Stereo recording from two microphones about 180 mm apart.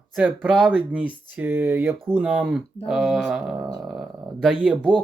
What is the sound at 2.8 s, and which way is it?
Mantra, centre (ahead or behind).